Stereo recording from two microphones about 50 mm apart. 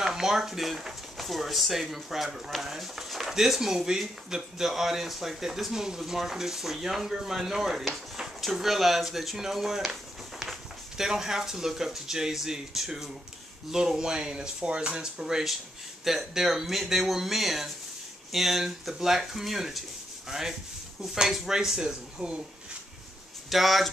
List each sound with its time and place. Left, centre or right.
0.0 s speech: centre
20.2 s sanding: centre
21.0 s speech: centre
23.5 s speech: centre